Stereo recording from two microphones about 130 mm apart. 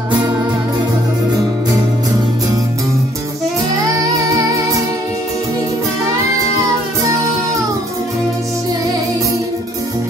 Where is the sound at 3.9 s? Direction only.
25° right (ahead or behind).